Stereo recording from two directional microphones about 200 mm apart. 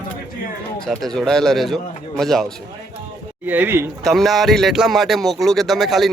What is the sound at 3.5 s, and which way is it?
Speech, 10° right (ahead or behind).